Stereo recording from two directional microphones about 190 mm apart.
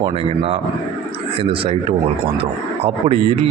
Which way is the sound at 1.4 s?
30° right (ahead or behind).